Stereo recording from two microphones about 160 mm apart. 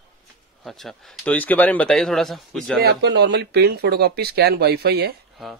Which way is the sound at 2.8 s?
90° right.